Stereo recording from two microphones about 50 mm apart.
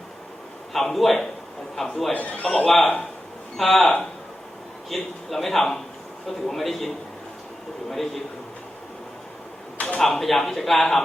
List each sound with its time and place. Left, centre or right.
0.7 s a man's voice: centre
2.1 s a man's voice: left
2.6 s a man's voice: centre
4.9 s a man's voice: centre
9.7 s a sound: left
10.0 s a man's voice: centre